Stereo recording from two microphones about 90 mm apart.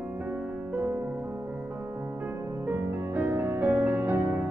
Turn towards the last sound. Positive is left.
turn(degrees=-20)  # may be behind; listen again after turning